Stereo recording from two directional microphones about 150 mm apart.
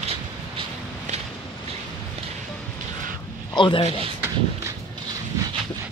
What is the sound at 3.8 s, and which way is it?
Speech, 40° right (ahead or behind).